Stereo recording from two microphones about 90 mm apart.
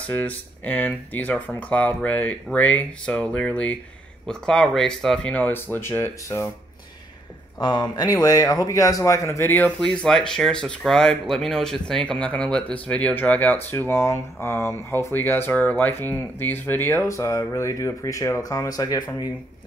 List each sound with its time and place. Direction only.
0.1 s speech: 20° left (ahead or behind)
5.3 s speech: 20° left (ahead or behind)
7.6 s a man's voice: 55° left (ahead or behind); by 9.7 s 25° left (ahead or behind)
10.0 s speech: 5° left (ahead or behind); by 19.0 s 40° left (ahead or behind)